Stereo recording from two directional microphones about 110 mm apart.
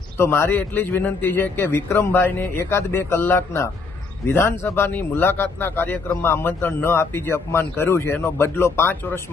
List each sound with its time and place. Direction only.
0.2 s speech: 20° left (ahead or behind)